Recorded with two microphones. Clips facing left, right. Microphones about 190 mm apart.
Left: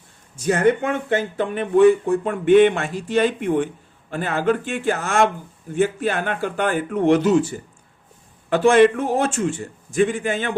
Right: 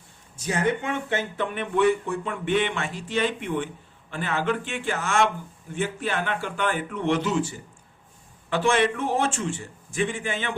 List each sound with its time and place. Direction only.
0.4 s speech: 50° left (ahead or behind)
8.4 s speech: 45° left (ahead or behind)